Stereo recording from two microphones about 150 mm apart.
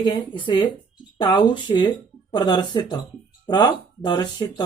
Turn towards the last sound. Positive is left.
turn(degrees=25)  # may be behind; listen again after turning